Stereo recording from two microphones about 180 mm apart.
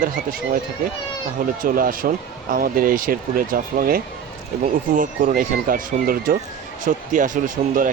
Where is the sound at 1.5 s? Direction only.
50° right (ahead or behind).